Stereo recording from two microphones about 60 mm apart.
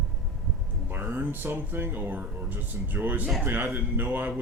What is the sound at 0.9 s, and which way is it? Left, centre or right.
Speech, right.